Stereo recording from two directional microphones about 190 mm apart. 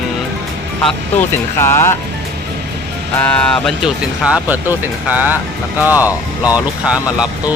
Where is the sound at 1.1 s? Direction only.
15° left (ahead or behind).